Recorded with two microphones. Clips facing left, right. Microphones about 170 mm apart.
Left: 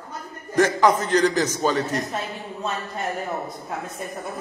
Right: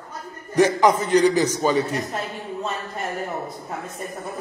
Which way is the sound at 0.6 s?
15° right (ahead or behind).